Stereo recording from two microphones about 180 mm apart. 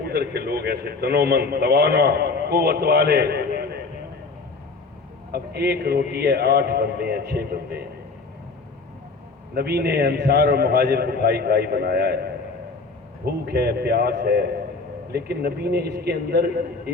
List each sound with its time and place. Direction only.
0.1 s a man's voice: 65° right (ahead or behind)
5.3 s a man's voice: 60° right (ahead or behind)
9.6 s a man's voice: 60° right (ahead or behind)